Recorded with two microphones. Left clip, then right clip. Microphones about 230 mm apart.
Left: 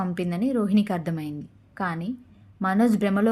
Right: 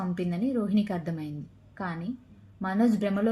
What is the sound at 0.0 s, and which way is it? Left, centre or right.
A woman's voice, left.